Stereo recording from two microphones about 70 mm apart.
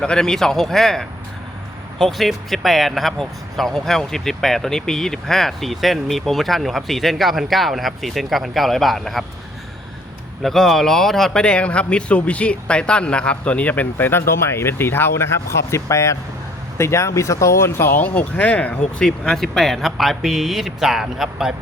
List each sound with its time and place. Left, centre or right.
0.0 s speech: centre
10.4 s speech: centre; by 17.9 s left
18.0 s speech: left; by 21.5 s centre